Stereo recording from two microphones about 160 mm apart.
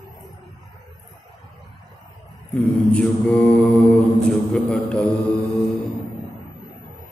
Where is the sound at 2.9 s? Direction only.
5° left (ahead or behind).